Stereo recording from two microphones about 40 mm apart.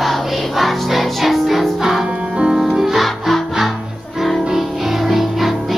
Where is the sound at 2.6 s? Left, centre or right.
Centre.